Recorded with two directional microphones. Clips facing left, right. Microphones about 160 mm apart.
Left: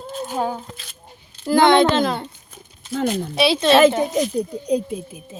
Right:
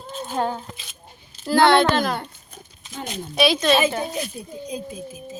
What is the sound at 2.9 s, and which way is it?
Speech, 60° left (ahead or behind).